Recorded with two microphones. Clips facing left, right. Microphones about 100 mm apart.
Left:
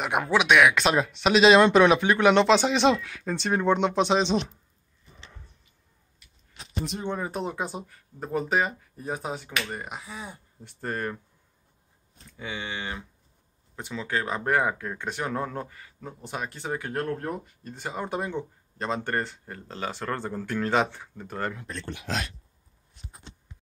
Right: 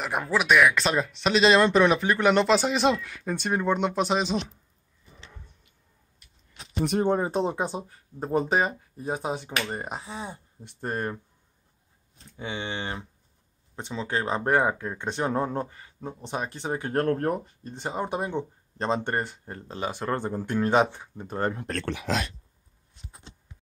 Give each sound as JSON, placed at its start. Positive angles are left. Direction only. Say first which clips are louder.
{"t": 0.0, "sound": "speech", "louder": "left 2 dB", "side_deg": 5}
{"t": 7.0, "sound": "speech", "louder": "right 7 dB", "side_deg": -35}
{"t": 9.8, "sound": "speech", "louder": "right 3 dB", "side_deg": -35}
{"t": 12.4, "sound": "speech", "louder": "right 2 dB", "side_deg": -25}
{"t": 16.9, "sound": "speech", "louder": "right 8 dB", "side_deg": -50}
{"t": 17.5, "sound": "speech", "louder": "right 2 dB", "side_deg": -25}